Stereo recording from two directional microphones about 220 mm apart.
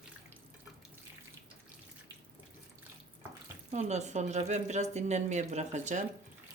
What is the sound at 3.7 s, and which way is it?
Speech, 30° right (ahead or behind).